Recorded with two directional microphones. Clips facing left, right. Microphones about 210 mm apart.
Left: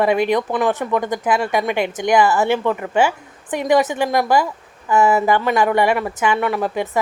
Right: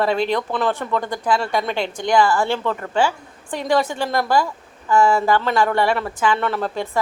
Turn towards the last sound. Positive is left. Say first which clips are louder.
# left 3 dB
turn(degrees=15)  # may be behind; listen again after turning